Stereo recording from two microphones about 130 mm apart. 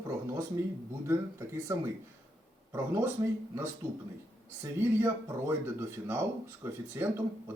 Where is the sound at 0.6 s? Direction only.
15° right (ahead or behind).